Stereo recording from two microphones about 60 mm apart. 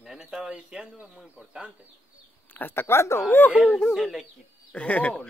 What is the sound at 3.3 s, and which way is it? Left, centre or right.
Speech, left.